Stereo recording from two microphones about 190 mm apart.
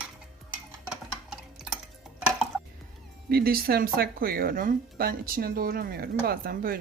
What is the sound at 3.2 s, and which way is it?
Speech, 55° right (ahead or behind).